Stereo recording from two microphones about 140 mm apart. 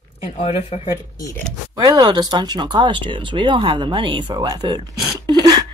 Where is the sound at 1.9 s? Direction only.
30° right (ahead or behind).